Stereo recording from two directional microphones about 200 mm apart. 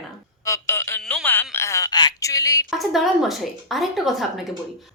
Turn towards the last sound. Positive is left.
turn(degrees=0)  # may be behind; listen again after turning